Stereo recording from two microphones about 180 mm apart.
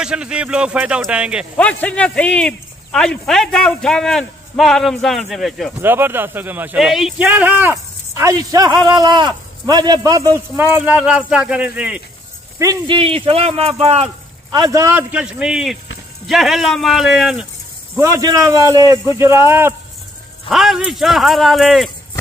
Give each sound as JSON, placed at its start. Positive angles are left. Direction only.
{"t": 0.0, "sound": "speech", "side_deg": -5}
{"t": 1.6, "sound": "speech", "side_deg": 5}
{"t": 5.8, "sound": "speech", "side_deg": -10}
{"t": 12.5, "sound": "speech", "side_deg": -25}
{"t": 17.9, "sound": "speech", "side_deg": -15}
{"t": 20.4, "sound": "speech", "side_deg": 0}